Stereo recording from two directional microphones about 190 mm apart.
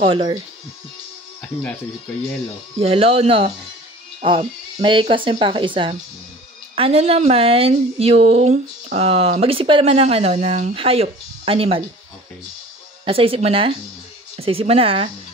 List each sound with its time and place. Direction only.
0.0 s speech: 25° right (ahead or behind)
2.8 s speech: 30° right (ahead or behind)
13.0 s speech: 30° right (ahead or behind)